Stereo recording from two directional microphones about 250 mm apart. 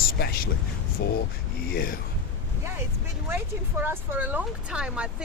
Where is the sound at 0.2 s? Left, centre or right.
Left.